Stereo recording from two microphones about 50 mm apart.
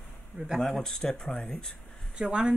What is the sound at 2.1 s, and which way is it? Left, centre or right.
Speech, centre.